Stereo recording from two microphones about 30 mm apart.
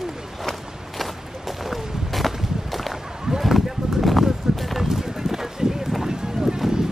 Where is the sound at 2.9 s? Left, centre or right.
Centre.